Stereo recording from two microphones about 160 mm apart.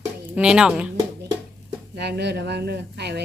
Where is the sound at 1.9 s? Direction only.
90° right.